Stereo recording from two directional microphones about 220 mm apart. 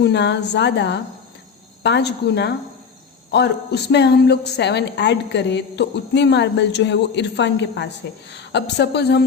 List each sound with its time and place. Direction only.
0.0 s a woman's voice: 50° left (ahead or behind)